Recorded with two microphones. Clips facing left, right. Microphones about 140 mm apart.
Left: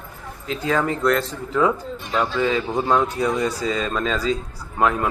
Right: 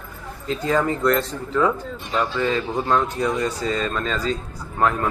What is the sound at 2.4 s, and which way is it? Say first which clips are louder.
A man's voice: left 1 dB; 10° left (ahead or behind).